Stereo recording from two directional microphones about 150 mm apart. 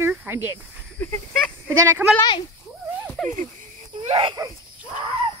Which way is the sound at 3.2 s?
Centre (ahead or behind).